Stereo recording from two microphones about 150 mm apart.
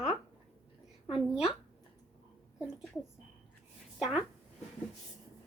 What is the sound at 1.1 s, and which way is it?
Speech, 5° right (ahead or behind).